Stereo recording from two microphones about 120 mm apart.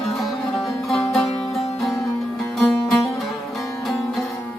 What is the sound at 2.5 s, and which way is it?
Music, 5° left (ahead or behind).